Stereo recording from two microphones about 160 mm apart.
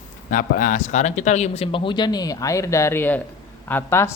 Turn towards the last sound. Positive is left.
turn(degrees=15)  # may be behind; listen again after turning